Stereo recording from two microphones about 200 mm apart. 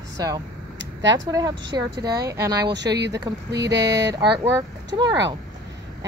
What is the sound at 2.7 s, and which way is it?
Speech, 60° right (ahead or behind).